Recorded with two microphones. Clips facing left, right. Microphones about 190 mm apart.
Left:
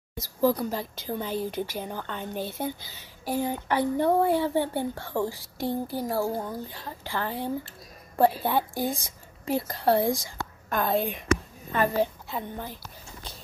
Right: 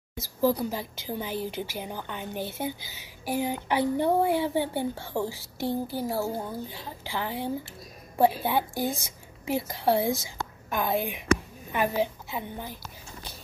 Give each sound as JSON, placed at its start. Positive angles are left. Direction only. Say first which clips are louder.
{"t": 0.5, "sound": "a woman's voice", "louder": "even", "side_deg": -10}
{"t": 5.7, "sound": "speech", "louder": "even", "side_deg": 25}
{"t": 6.0, "sound": "a woman's voice", "louder": "left 2 dB", "side_deg": -5}